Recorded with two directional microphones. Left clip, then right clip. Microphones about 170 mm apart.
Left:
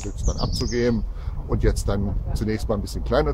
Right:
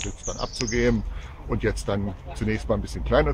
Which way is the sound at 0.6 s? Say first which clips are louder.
Even; 20° left (ahead or behind).